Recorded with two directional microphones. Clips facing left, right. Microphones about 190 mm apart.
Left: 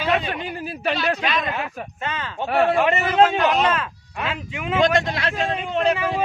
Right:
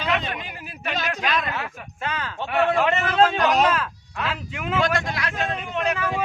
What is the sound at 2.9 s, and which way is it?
A man's voice, 10° left (ahead or behind).